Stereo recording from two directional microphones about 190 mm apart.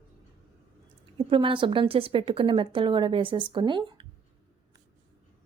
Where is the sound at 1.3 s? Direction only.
25° right (ahead or behind).